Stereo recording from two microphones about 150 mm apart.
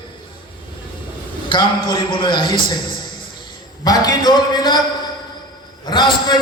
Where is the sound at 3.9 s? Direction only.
25° left (ahead or behind).